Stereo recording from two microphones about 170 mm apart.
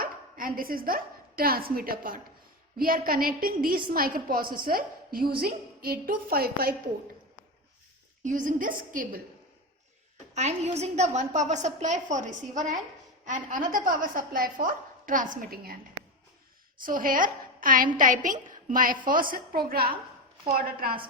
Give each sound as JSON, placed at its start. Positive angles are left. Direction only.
{"t": 0.0, "sound": "a woman's voice", "side_deg": -55}
{"t": 8.2, "sound": "a woman's voice", "side_deg": -50}
{"t": 10.3, "sound": "a woman's voice", "side_deg": -40}
{"t": 16.7, "sound": "a woman's voice", "side_deg": -55}